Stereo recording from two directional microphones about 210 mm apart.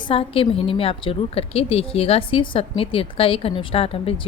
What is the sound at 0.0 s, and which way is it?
A woman's voice, 25° left (ahead or behind).